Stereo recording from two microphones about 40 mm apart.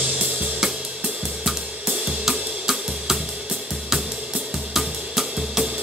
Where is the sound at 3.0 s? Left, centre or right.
Centre.